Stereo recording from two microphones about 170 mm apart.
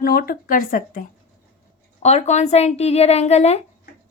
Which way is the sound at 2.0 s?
40° left (ahead or behind).